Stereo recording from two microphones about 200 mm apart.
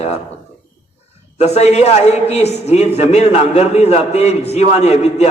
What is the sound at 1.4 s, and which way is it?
A man's voice, 35° left (ahead or behind).